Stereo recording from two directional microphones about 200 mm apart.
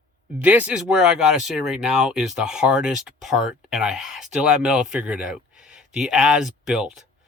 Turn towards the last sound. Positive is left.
turn(degrees=0)  # may be behind; listen again after turning